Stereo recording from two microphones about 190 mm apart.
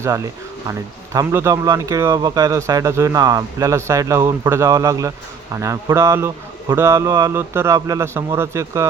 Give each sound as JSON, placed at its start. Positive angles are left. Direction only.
{"t": 0.0, "sound": "speech", "side_deg": -15}